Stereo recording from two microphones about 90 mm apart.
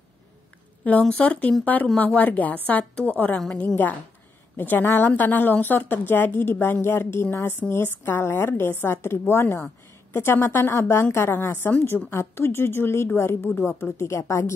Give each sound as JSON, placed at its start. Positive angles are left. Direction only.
{"t": 0.8, "sound": "a woman's voice", "side_deg": 15}
{"t": 3.3, "sound": "a woman's voice", "side_deg": 5}
{"t": 3.6, "sound": "a woman's voice", "side_deg": 20}